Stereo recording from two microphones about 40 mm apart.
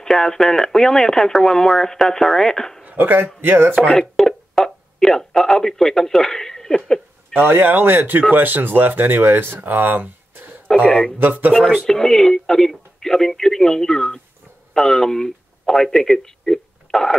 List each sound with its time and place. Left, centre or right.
0.0 s speech: centre
2.8 s a sound: right
3.3 s speech: right
4.2 s a sound: centre
7.3 s speech: right
10.3 s a sound: right
10.9 s speech: centre
11.1 s speech: right
11.8 s speech: centre